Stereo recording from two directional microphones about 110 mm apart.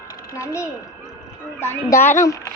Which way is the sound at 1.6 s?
25° left (ahead or behind).